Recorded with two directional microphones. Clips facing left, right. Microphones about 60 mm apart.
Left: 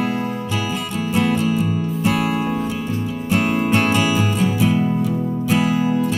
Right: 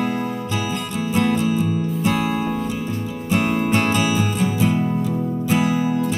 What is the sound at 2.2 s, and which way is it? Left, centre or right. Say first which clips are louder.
Music: left 1 dB; left.